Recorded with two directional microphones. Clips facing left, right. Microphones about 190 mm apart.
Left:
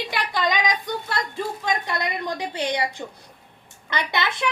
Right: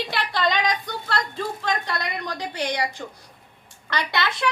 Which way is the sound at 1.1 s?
15° left (ahead or behind).